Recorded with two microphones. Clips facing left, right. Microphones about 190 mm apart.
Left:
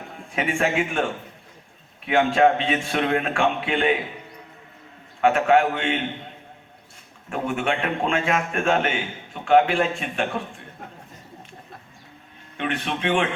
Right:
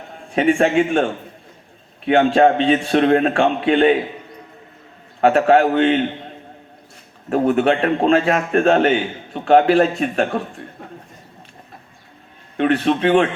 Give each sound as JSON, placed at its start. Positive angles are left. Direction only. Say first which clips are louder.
{"t": 0.3, "sound": "a man's voice", "louder": "right 8 dB", "side_deg": -30}
{"t": 2.0, "sound": "a man's voice", "louder": "right 5 dB", "side_deg": -35}
{"t": 5.2, "sound": "a man's voice", "louder": "right 5 dB", "side_deg": -35}
{"t": 7.3, "sound": "a man's voice", "louder": "right 9 dB", "side_deg": -35}
{"t": 12.5, "sound": "a man's voice", "louder": "right 11 dB", "side_deg": -40}